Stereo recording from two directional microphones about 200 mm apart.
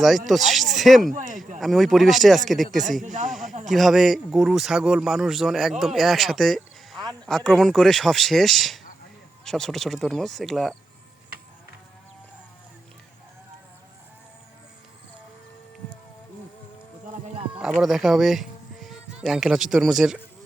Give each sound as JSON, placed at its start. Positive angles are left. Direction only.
{"t": 0.3, "sound": "speech", "side_deg": 0}
{"t": 1.1, "sound": "speech", "side_deg": -40}
{"t": 1.5, "sound": "speech", "side_deg": 0}
{"t": 3.0, "sound": "speech", "side_deg": -40}
{"t": 3.4, "sound": "a sound", "side_deg": -40}
{"t": 3.7, "sound": "speech", "side_deg": 0}
{"t": 17.6, "sound": "speech", "side_deg": -5}